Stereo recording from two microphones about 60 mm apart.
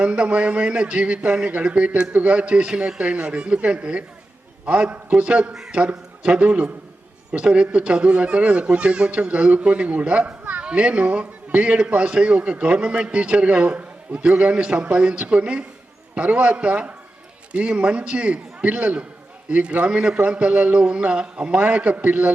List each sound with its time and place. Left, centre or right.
0.0 s a man's voice: centre
4.9 s a man's voice: right
5.5 s a man's voice: centre
5.8 s a man's voice: centre
10.4 s a sound: right
10.7 s a man's voice: centre